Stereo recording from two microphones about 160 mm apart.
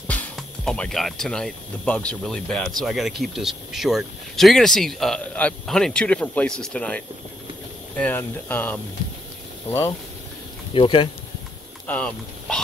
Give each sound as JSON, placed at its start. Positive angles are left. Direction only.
{"t": 0.1, "sound": "speech", "side_deg": 5}
{"t": 8.0, "sound": "speech", "side_deg": 10}
{"t": 10.7, "sound": "speech", "side_deg": 30}
{"t": 11.9, "sound": "speech", "side_deg": 5}